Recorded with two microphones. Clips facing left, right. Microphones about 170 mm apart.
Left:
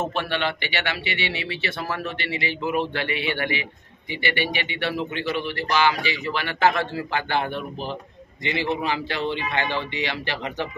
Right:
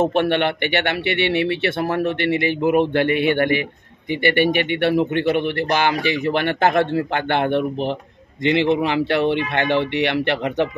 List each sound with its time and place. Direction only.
0.0 s a man's voice: 55° right (ahead or behind)